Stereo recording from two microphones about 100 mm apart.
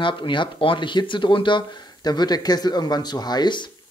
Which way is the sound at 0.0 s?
55° left (ahead or behind).